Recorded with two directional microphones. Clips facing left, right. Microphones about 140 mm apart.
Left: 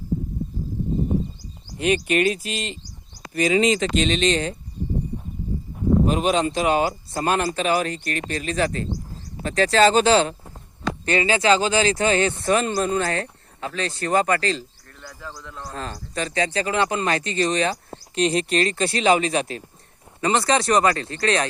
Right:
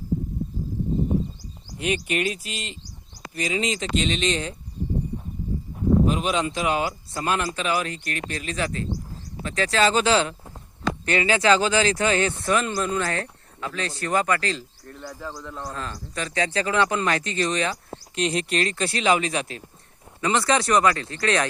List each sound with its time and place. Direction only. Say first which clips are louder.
1.9 s speech: left 5 dB; 50° left (ahead or behind); by 4.5 s 65° left (ahead or behind)
6.1 s speech: left 3 dB; 45° left (ahead or behind)
14.8 s a man's voice: right 4 dB; 20° right (ahead or behind)
15.7 s speech: left 2 dB; 35° left (ahead or behind)
20.2 s speech: left 2 dB; 25° left (ahead or behind)